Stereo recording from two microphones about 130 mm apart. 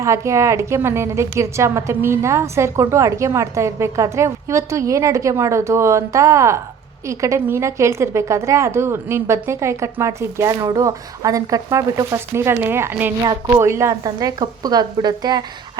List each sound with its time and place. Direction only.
0.0 s a woman's voice: 25° right (ahead or behind)